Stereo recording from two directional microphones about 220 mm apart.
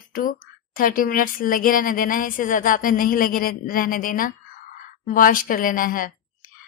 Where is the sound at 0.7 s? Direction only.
40° left (ahead or behind).